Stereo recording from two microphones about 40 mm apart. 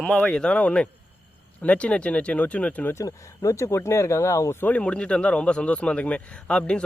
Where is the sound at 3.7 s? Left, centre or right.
Left.